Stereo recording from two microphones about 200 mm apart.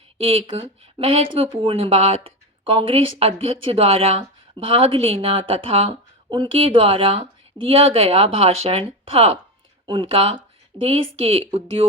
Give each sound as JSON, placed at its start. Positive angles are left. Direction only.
{"t": 0.2, "sound": "speech", "side_deg": -30}